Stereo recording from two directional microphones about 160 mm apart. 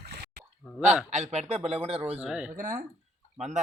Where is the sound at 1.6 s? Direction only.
5° right (ahead or behind).